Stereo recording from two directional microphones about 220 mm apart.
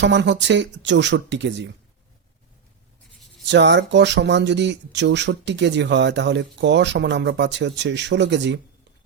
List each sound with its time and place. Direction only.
0.0 s speech: 55° right (ahead or behind)
3.4 s speech: 55° right (ahead or behind)